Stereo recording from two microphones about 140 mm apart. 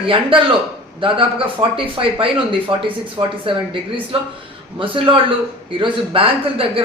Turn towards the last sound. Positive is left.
turn(degrees=-40)  # may be behind; listen again after turning